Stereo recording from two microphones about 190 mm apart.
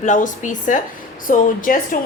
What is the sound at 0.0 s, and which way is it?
A woman's voice, 40° left (ahead or behind).